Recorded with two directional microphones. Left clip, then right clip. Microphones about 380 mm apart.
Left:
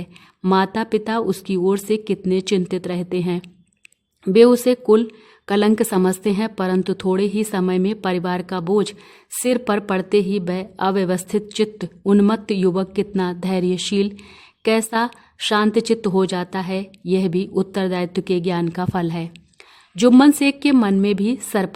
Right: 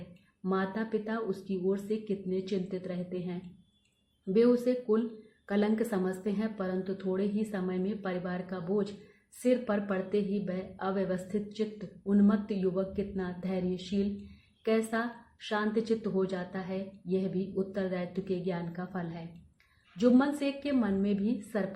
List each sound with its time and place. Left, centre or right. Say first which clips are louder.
0.4 s a woman's voice: left 15 dB; left